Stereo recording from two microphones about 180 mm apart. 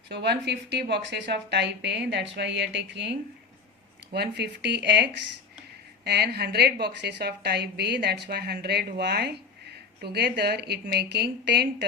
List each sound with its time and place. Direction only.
0.1 s speech: 65° right (ahead or behind)
6.1 s a woman's voice: 65° right (ahead or behind)